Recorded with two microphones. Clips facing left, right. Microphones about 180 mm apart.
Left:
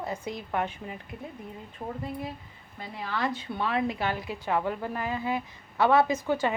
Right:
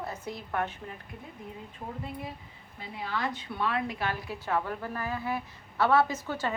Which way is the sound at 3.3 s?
25° left (ahead or behind).